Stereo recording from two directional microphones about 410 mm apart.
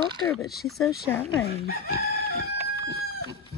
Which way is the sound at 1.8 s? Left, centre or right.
Right.